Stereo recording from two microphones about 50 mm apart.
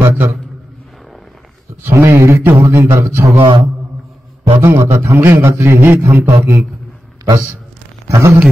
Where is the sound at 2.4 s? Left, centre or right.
Right.